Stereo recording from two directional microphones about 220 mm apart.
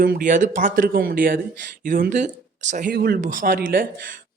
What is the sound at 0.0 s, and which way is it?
Speech, 40° right (ahead or behind).